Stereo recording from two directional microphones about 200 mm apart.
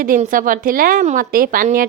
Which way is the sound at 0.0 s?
45° right (ahead or behind).